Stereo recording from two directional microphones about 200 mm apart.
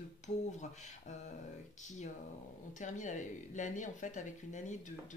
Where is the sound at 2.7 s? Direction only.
35° left (ahead or behind).